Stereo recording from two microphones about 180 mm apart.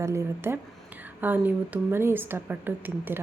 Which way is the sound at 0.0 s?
15° right (ahead or behind).